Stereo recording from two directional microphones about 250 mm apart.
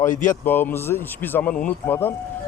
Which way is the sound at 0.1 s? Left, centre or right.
Left.